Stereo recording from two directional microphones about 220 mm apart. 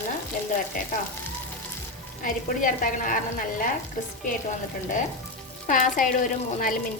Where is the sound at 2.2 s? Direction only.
35° left (ahead or behind).